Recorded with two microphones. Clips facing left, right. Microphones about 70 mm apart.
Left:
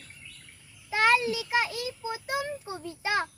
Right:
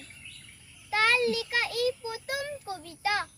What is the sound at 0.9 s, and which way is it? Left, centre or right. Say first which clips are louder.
A child's voice: left 1 dB; centre.